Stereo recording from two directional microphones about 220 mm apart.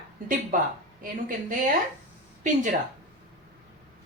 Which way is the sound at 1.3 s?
35° right (ahead or behind).